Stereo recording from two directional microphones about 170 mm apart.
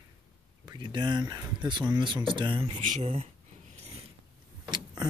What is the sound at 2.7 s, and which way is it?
Speech, 45° right (ahead or behind).